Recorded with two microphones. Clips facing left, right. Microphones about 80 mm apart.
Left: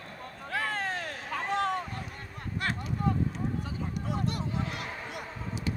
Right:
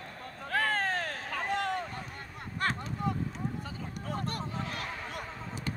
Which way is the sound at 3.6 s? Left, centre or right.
Right.